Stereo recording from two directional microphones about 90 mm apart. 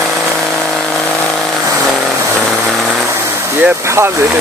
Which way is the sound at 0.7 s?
5° left (ahead or behind).